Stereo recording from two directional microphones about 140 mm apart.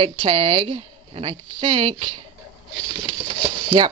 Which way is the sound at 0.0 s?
40° right (ahead or behind).